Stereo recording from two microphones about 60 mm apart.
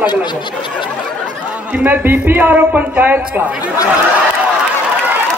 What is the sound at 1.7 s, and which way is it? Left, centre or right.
A man's voice, right.